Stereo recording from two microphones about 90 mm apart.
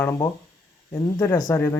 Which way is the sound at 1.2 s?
25° left (ahead or behind).